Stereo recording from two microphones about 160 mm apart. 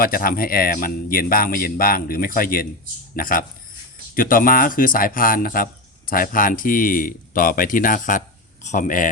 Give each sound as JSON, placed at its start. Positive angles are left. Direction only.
{"t": 0.0, "sound": "speech", "side_deg": 65}